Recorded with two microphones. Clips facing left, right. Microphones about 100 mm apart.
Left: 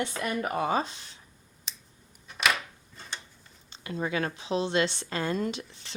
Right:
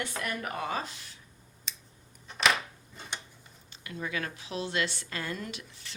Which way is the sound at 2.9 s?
15° right (ahead or behind).